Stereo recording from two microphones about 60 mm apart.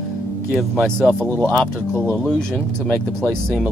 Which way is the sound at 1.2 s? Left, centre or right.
Right.